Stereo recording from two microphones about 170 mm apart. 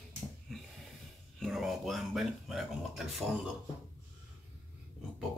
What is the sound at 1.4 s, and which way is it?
Speech, centre (ahead or behind).